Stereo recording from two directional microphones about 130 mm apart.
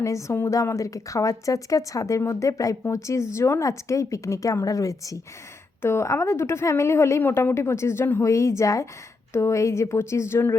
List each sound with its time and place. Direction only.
0.0 s a woman's voice: 20° left (ahead or behind)